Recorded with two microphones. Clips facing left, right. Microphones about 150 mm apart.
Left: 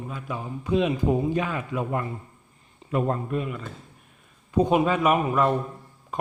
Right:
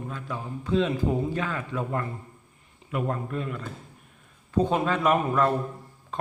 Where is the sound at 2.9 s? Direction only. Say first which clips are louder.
Left 4 dB; 35° left (ahead or behind).